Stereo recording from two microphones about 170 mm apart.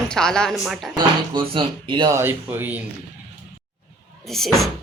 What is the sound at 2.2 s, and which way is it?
Speech, 15° right (ahead or behind).